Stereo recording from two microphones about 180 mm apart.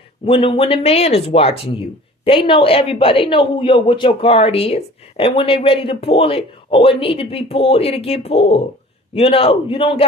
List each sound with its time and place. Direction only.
0.3 s speech: 30° left (ahead or behind)